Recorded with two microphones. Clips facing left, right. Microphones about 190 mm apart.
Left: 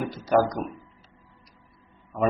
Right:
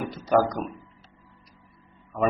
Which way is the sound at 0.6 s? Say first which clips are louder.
Even; 15° left (ahead or behind).